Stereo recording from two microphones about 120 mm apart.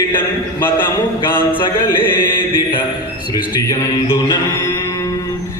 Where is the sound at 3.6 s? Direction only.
30° left (ahead or behind).